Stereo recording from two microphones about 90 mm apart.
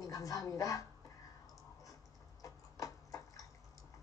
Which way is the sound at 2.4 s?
40° left (ahead or behind).